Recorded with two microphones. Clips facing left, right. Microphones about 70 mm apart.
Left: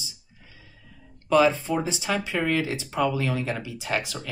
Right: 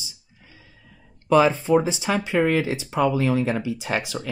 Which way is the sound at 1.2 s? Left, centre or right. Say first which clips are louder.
Right 2 dB; right.